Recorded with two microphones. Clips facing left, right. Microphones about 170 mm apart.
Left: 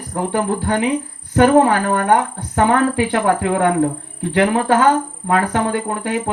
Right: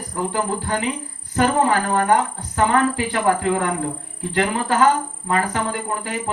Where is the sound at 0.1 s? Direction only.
60° left (ahead or behind).